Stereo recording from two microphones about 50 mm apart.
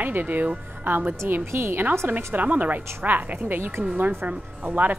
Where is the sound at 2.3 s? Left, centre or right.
Right.